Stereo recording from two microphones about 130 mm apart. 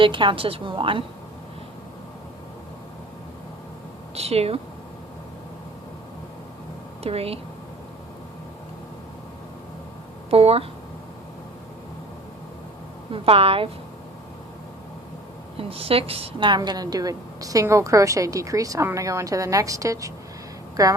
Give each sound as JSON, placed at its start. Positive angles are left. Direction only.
{"t": 0.0, "sound": "a woman's voice", "side_deg": -40}
{"t": 4.1, "sound": "speech", "side_deg": -50}
{"t": 7.0, "sound": "a woman's voice", "side_deg": -50}
{"t": 10.2, "sound": "a woman's voice", "side_deg": -50}
{"t": 13.1, "sound": "a woman's voice", "side_deg": -45}
{"t": 15.5, "sound": "a woman's voice", "side_deg": -45}